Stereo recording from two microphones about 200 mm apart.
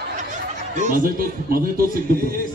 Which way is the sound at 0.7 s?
40° right (ahead or behind).